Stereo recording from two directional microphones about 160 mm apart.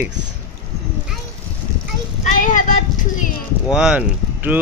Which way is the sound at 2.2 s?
55° left (ahead or behind).